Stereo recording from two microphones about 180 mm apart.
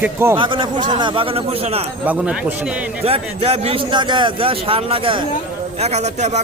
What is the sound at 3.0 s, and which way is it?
Speech, 35° right (ahead or behind).